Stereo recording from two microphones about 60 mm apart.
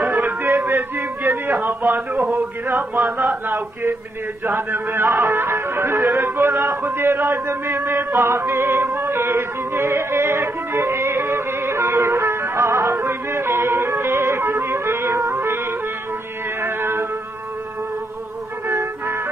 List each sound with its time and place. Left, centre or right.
0.0 s music: right
2.3 s chant: right
4.5 s music: right
16.6 s music: right
18.7 s music: right